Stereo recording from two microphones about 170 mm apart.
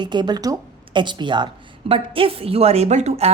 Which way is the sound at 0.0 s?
25° right (ahead or behind).